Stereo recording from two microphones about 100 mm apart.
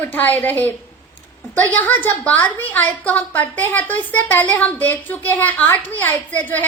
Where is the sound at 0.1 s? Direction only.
20° left (ahead or behind).